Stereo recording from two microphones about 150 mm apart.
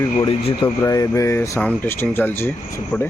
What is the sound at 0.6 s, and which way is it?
Speech, 25° left (ahead or behind).